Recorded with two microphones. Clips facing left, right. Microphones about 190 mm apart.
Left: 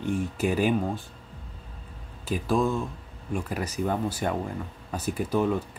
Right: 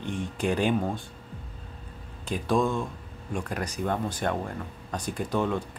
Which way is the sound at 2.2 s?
5° left (ahead or behind).